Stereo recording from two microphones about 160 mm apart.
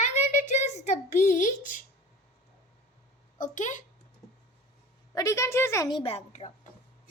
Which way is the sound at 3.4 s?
50° left (ahead or behind).